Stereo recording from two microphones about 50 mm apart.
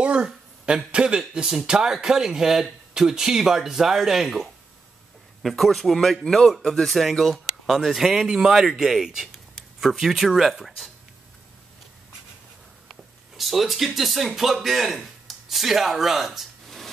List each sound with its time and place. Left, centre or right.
0.0 s a sound: right
0.9 s speech: centre
13.4 s speech: centre